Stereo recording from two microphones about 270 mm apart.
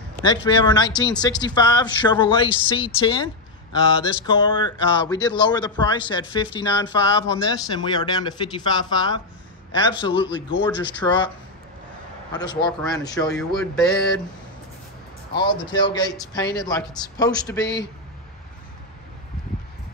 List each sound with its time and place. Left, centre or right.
0.2 s speech: centre
12.3 s speech: centre
13.6 s mantra: centre
15.3 s speech: centre